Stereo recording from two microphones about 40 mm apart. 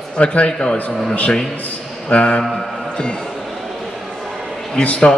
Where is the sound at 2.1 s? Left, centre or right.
Left.